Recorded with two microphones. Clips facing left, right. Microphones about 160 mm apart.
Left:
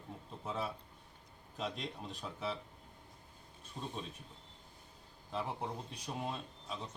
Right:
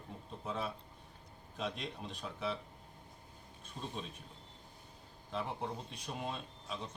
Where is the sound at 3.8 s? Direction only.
15° left (ahead or behind).